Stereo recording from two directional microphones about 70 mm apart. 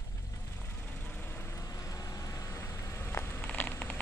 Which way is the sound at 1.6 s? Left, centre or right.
Left.